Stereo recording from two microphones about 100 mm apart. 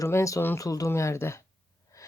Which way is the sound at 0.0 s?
30° left (ahead or behind).